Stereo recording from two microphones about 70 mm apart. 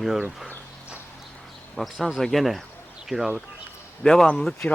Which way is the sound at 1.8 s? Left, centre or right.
Centre.